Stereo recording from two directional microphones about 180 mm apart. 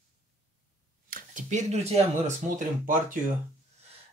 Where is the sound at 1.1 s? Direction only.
45° right (ahead or behind).